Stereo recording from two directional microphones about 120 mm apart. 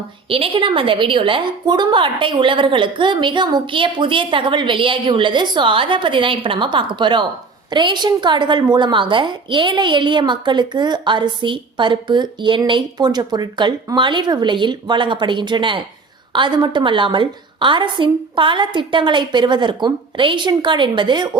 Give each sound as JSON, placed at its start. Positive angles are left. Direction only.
{"t": 0.3, "sound": "a woman's voice", "side_deg": -50}